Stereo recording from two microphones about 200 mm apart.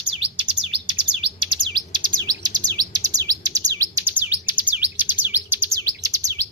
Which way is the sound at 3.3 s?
15° right (ahead or behind).